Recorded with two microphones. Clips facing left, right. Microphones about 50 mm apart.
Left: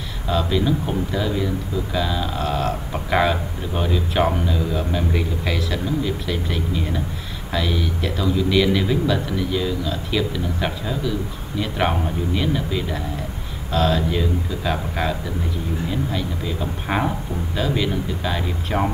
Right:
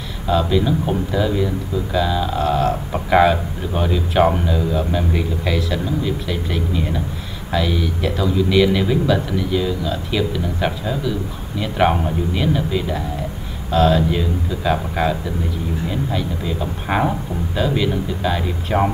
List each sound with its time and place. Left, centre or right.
0.3 s speech: centre